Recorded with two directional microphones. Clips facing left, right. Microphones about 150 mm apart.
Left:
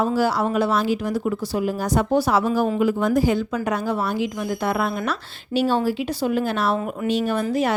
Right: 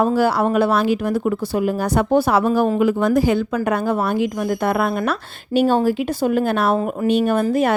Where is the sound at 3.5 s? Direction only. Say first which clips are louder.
Right 4 dB; 55° right (ahead or behind).